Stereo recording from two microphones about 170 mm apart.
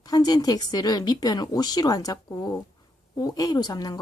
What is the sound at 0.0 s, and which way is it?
Speech, 25° left (ahead or behind).